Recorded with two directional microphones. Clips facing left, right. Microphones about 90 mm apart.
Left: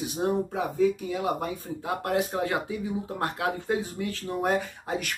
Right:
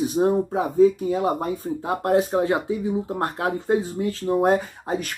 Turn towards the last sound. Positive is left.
turn(degrees=-35)  # may be behind; listen again after turning